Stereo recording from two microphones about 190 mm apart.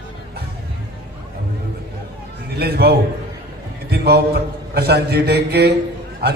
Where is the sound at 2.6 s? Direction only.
55° right (ahead or behind).